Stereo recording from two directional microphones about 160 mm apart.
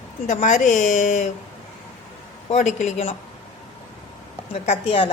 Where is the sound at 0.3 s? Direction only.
50° left (ahead or behind).